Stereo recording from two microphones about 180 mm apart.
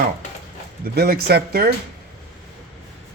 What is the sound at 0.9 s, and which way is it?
Speech, 60° right (ahead or behind).